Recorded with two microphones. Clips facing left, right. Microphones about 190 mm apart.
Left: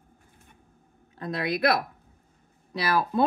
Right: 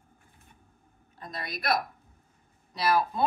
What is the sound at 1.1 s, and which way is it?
Speech, 70° left (ahead or behind).